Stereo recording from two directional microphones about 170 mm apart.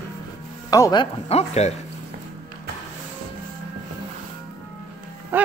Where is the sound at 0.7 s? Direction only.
20° left (ahead or behind).